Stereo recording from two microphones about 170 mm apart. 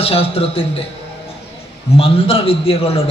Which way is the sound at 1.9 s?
35° left (ahead or behind).